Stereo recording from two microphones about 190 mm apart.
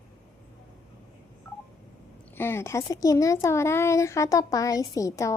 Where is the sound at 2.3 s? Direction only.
10° left (ahead or behind).